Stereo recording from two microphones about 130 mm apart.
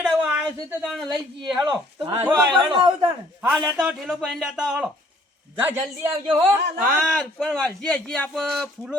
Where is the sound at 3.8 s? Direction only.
Centre (ahead or behind).